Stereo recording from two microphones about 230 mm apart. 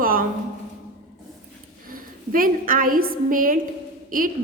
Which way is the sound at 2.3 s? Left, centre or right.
Right.